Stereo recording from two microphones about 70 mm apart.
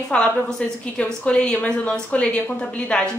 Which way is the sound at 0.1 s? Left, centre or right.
Centre.